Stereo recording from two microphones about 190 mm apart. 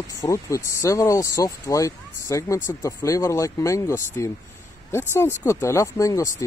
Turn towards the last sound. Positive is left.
turn(degrees=15)  # may be behind; listen again after turning